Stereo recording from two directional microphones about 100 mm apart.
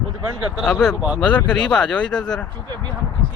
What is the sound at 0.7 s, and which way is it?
Speech, 10° left (ahead or behind).